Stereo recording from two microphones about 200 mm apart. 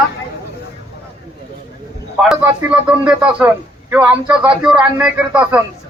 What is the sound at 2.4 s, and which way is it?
A man's voice, 10° right (ahead or behind).